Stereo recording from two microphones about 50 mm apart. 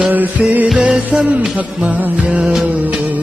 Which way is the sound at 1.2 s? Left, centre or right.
Right.